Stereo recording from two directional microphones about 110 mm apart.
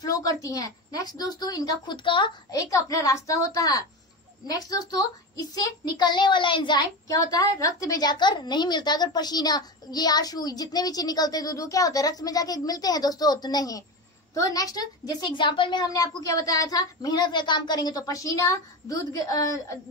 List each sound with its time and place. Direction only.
0.0 s a child's voice: 30° left (ahead or behind); by 2.6 s 50° left (ahead or behind)
2.7 s a child's voice: 30° left (ahead or behind)
15.9 s a child's voice: 30° left (ahead or behind)